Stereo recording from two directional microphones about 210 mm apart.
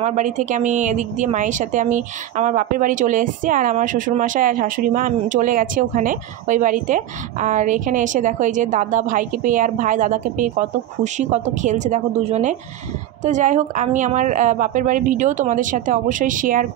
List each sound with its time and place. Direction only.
0.0 s a woman's voice: 35° right (ahead or behind)